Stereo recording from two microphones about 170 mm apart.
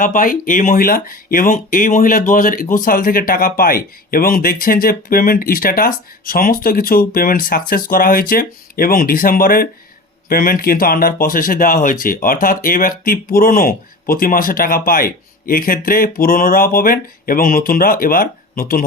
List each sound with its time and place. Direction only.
0.0 s speech: 50° left (ahead or behind)